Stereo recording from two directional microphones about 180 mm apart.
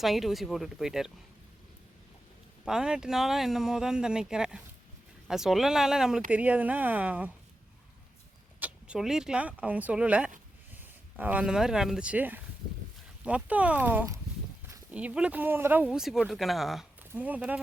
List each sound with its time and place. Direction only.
0.0 s speech: centre (ahead or behind)
2.6 s speech: 5° right (ahead or behind)
8.5 s speech: 10° right (ahead or behind)